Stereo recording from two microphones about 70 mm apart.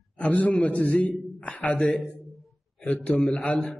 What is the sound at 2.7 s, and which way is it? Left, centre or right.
Speech, centre.